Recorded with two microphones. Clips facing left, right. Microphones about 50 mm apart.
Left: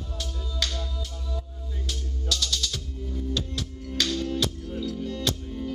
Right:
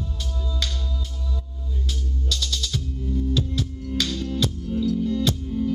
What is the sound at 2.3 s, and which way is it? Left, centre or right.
Music, centre.